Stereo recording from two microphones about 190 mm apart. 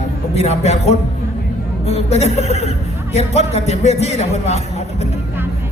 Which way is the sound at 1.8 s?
35° left (ahead or behind).